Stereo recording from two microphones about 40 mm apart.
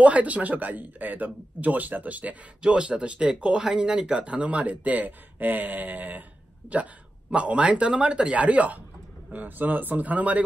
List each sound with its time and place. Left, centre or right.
0.0 s speech: right
2.6 s speech: right
6.7 s speech: right
9.3 s speech: right